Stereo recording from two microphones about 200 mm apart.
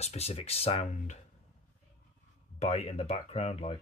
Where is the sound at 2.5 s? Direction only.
30° left (ahead or behind).